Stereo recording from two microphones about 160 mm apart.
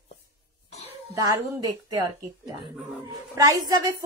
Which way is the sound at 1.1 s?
20° right (ahead or behind).